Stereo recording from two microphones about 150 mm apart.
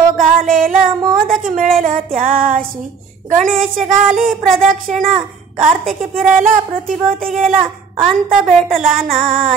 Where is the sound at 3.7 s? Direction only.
60° right (ahead or behind).